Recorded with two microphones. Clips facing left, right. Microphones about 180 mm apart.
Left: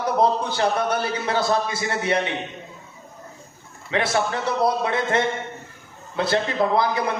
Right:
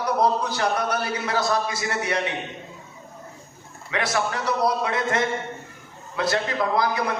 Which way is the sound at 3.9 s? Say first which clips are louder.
Left 3 dB; 25° left (ahead or behind).